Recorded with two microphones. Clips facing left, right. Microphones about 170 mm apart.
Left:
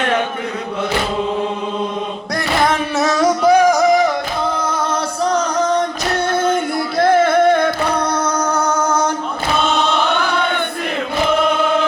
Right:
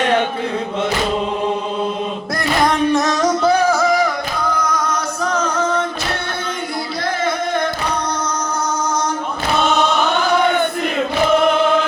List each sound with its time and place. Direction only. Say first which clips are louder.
2.6 s music: right 4 dB; 10° left (ahead or behind); by 5.8 s 35° left (ahead or behind)
7.0 s singing: left 10 dB; 55° left (ahead or behind)